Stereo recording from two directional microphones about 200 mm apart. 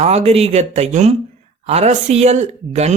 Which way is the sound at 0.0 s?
30° right (ahead or behind).